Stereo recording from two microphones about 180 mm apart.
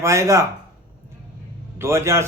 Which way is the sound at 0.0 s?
15° right (ahead or behind).